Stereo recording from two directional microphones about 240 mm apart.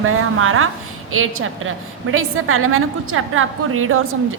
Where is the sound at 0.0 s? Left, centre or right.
Right.